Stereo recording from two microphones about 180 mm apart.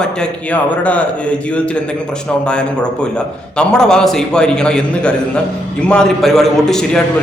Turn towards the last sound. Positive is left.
turn(degrees=5)  # may be behind; listen again after turning